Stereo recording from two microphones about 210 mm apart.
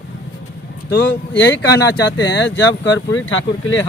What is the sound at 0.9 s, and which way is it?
Speech, 60° left (ahead or behind).